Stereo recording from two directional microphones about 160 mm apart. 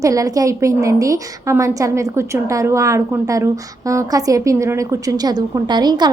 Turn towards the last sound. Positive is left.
turn(degrees=-25)  # may be behind; listen again after turning